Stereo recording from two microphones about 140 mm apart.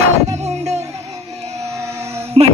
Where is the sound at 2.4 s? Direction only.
45° right (ahead or behind).